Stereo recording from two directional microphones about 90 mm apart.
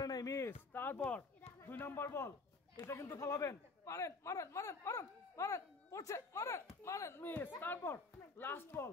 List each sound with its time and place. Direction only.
0.0 s a sound: 45° left (ahead or behind)
0.5 s speech: 20° left (ahead or behind)
1.6 s speech: 25° left (ahead or behind)